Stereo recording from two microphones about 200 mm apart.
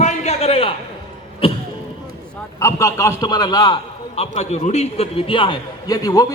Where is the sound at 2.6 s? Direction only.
15° left (ahead or behind).